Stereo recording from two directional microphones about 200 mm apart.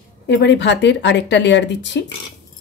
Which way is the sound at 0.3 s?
60° left (ahead or behind).